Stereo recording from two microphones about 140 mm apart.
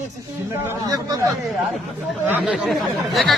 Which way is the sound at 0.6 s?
25° right (ahead or behind).